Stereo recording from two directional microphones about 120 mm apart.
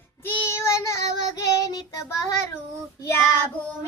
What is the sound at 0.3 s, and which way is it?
Child singing, 20° left (ahead or behind).